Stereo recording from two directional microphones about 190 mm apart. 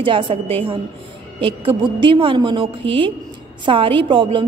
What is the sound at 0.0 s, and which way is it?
A woman's voice, 25° right (ahead or behind).